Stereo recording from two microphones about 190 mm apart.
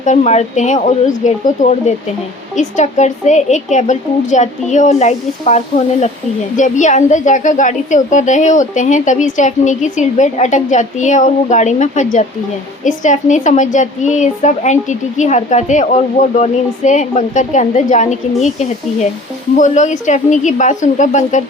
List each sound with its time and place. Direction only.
0.0 s speech: 40° left (ahead or behind)
2.6 s speech: 40° left (ahead or behind)
19.5 s speech: 40° left (ahead or behind)